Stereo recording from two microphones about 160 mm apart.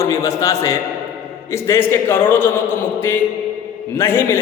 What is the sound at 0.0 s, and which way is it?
Speech, 20° left (ahead or behind).